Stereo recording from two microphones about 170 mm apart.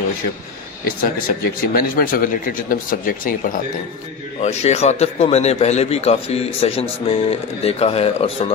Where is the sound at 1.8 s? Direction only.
60° left (ahead or behind).